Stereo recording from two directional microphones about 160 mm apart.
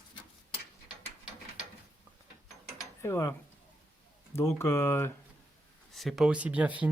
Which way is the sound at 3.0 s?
20° left (ahead or behind).